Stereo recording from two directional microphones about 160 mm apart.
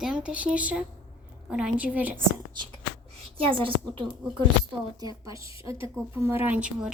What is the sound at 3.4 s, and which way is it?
Speech, 35° right (ahead or behind).